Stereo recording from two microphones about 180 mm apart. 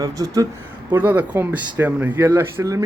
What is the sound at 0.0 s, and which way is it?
Speech, 20° right (ahead or behind).